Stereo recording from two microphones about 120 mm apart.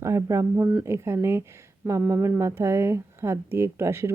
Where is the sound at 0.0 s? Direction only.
25° right (ahead or behind).